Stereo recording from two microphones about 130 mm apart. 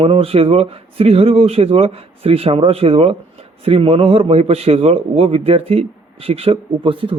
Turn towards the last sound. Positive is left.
turn(degrees=-45)  # may be behind; listen again after turning